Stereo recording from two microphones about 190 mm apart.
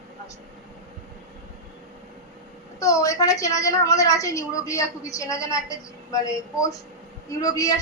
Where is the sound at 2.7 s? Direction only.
15° left (ahead or behind).